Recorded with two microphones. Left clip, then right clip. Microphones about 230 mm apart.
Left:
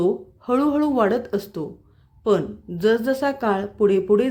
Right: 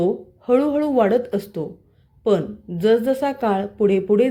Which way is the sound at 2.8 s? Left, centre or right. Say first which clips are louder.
Right 2 dB; centre.